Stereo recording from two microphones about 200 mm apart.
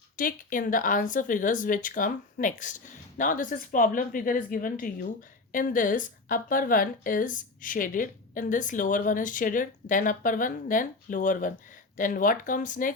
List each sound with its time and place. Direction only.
0.2 s speech: 45° left (ahead or behind)